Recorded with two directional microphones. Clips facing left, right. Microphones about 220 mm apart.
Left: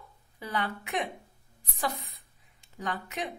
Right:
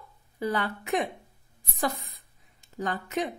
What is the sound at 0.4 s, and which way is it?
Speech, 45° right (ahead or behind).